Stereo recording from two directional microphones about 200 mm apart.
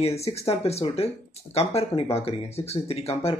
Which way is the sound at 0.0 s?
30° left (ahead or behind).